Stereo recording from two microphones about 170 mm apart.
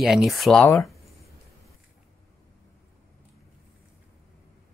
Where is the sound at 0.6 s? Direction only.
15° left (ahead or behind).